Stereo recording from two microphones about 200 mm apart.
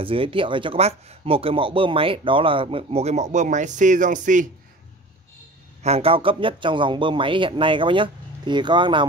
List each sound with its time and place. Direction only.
0.0 s speech: 25° right (ahead or behind)
5.8 s speech: 30° right (ahead or behind)